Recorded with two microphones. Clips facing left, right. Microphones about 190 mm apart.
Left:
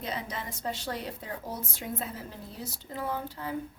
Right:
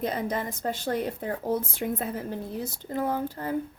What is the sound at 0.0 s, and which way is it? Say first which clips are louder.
A woman's voice: right 8 dB; 50° right (ahead or behind).